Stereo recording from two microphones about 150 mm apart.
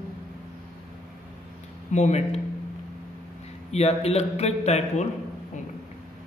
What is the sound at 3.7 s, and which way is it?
A man's voice, 45° left (ahead or behind).